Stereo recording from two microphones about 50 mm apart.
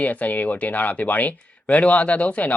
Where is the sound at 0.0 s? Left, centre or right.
Left.